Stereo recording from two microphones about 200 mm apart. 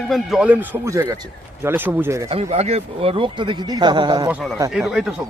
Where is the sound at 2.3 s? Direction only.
30° right (ahead or behind).